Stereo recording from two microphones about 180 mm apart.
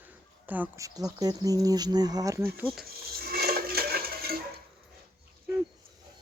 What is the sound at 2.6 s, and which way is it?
Speech, 5° right (ahead or behind).